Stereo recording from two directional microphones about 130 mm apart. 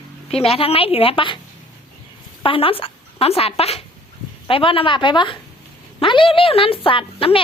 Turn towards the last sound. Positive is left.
turn(degrees=45)  # may be behind; listen again after turning